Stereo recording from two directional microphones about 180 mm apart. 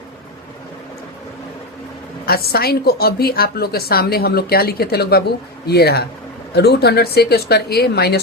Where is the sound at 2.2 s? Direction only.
60° left (ahead or behind).